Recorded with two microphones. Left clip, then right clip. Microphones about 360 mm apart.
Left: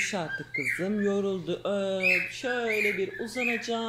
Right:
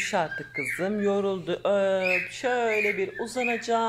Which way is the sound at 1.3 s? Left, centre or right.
Centre.